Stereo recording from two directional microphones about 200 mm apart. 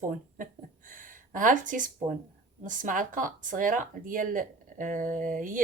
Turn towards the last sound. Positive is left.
turn(degrees=-40)  # may be behind; listen again after turning